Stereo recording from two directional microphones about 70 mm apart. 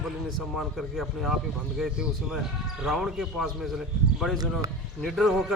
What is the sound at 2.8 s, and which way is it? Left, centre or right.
A man's voice, centre.